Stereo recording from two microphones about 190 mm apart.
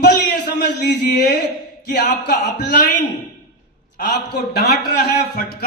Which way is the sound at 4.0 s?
55° left (ahead or behind).